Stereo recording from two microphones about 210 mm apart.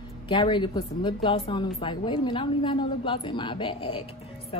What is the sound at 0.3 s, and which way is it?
A woman's voice, 20° left (ahead or behind).